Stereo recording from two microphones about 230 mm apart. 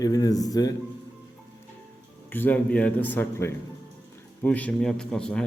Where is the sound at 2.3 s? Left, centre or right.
Centre.